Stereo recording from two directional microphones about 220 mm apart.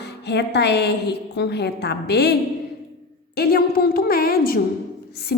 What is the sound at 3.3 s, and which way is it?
A woman's voice, 45° left (ahead or behind).